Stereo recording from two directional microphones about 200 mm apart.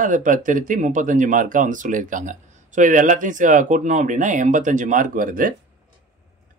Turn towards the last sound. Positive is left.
turn(degrees=-45)  # may be behind; listen again after turning